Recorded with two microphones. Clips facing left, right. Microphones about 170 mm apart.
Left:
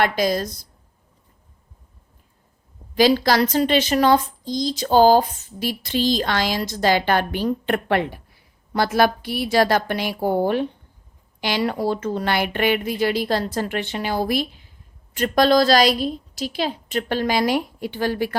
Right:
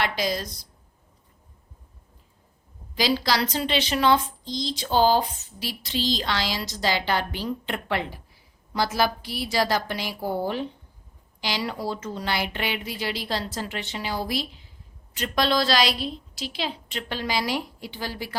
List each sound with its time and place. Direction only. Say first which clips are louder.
0.0 s a woman's voice: left 7 dB; 45° left (ahead or behind)
2.9 s a woman's voice: left 7 dB; 50° left (ahead or behind)